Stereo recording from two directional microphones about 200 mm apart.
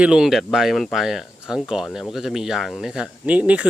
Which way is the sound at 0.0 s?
5° right (ahead or behind).